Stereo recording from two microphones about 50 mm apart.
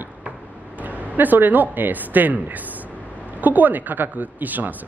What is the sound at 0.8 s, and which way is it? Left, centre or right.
A man's voice, right.